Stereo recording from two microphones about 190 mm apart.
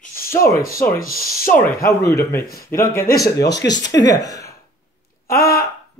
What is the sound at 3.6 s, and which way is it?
Speech, 70° left (ahead or behind).